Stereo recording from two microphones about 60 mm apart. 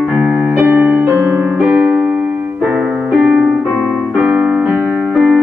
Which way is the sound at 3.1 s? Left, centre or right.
Centre.